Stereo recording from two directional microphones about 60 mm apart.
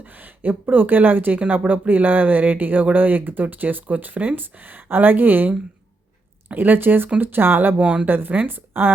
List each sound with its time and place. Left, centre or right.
0.0 s speech: right
6.5 s speech: right
7.8 s speech: centre
8.0 s speech: right